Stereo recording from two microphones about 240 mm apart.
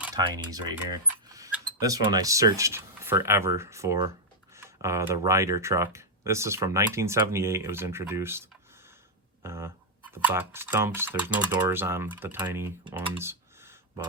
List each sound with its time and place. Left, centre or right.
0.0 s speech: centre